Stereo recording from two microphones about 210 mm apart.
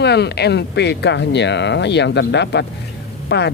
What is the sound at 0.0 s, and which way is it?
Speech, 50° left (ahead or behind).